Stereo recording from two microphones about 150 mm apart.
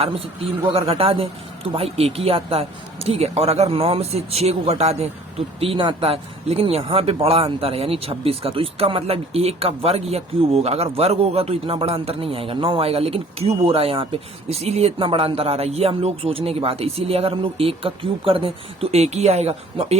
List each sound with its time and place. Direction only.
0.6 s speech: 40° right (ahead or behind)